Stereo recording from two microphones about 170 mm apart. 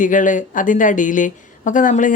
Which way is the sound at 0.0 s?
50° left (ahead or behind).